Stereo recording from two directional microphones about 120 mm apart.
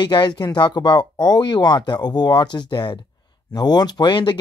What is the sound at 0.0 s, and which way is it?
Speech, 40° left (ahead or behind).